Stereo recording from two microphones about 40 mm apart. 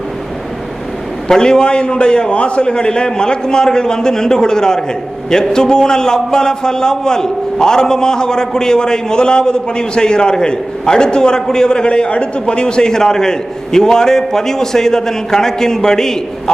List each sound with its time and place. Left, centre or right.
1.3 s a man's voice: centre